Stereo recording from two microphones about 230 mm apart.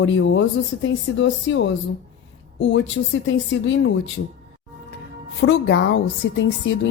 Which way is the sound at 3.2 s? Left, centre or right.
Left.